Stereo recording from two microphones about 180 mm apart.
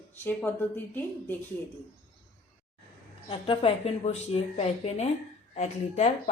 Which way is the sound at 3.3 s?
30° left (ahead or behind).